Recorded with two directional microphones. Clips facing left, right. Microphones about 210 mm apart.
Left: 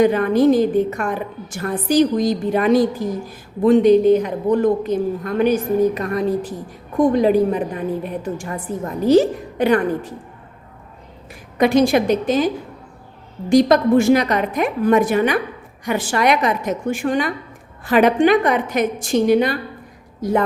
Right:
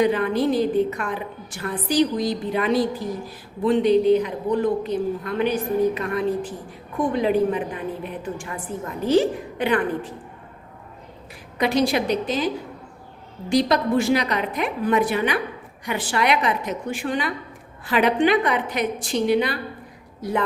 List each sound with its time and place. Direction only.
0.0 s a woman's voice: 45° left (ahead or behind)
11.5 s a woman's voice: 50° left (ahead or behind)
13.5 s a woman's voice: 45° left (ahead or behind)